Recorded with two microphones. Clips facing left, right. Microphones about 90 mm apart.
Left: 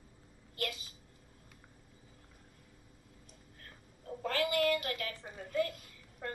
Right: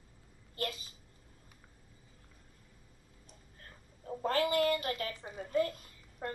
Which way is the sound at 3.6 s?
30° right (ahead or behind).